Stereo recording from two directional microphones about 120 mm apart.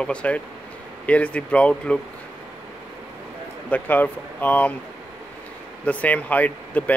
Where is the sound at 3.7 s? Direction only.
15° left (ahead or behind).